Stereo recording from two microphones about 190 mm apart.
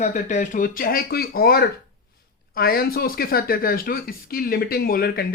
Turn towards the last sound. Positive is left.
turn(degrees=55)  # may be behind; listen again after turning